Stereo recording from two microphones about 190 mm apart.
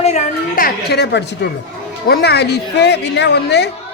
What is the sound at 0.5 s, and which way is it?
A man's voice, 55° left (ahead or behind).